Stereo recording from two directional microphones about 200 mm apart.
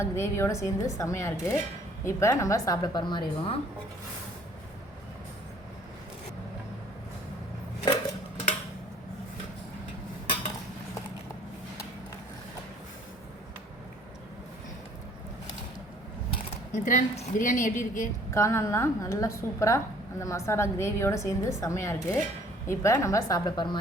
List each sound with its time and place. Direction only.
0.0 s a woman's voice: 15° left (ahead or behind)
16.7 s a woman's voice: 40° left (ahead or behind)
18.3 s a woman's voice: 15° left (ahead or behind)